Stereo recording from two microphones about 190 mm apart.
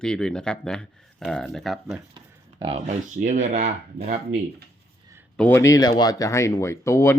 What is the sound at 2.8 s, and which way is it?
Speech, 40° right (ahead or behind).